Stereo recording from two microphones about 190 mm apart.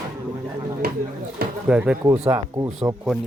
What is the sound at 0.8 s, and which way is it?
Speech, 50° right (ahead or behind).